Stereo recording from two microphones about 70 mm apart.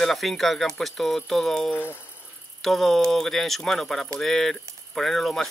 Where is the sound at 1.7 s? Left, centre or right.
Left.